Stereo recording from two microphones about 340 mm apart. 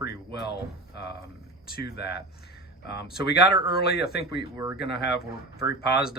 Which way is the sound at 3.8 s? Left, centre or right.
Left.